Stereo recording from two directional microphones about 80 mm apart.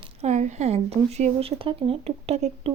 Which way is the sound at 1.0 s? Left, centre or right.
Right.